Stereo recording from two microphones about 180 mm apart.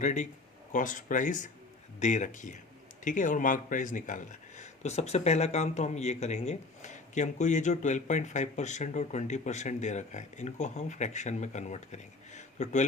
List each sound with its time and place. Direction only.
0.0 s speech: 40° left (ahead or behind)